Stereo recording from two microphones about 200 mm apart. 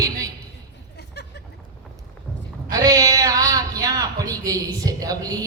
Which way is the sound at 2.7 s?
20° right (ahead or behind).